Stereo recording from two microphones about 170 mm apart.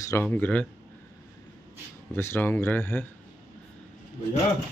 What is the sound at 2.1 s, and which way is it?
A man's voice, 15° left (ahead or behind).